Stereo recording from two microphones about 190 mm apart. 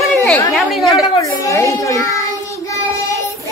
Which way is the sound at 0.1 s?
Centre (ahead or behind).